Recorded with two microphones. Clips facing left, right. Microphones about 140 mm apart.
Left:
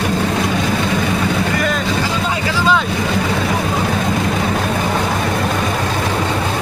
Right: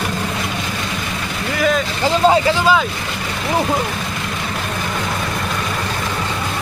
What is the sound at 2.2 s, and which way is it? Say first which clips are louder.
Vehicle: right 9 dB; 35° right (ahead or behind).